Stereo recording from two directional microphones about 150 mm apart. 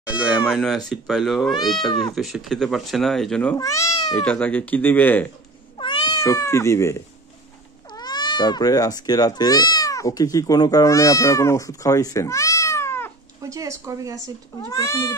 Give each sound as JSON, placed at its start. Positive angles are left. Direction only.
{"t": 0.2, "sound": "speech", "side_deg": -5}
{"t": 3.5, "sound": "speech", "side_deg": 20}
{"t": 4.2, "sound": "speech", "side_deg": 10}
{"t": 5.8, "sound": "cat", "side_deg": 30}
{"t": 6.1, "sound": "speech", "side_deg": 20}
{"t": 13.4, "sound": "a woman's voice", "side_deg": -20}
{"t": 14.7, "sound": "speech", "side_deg": 20}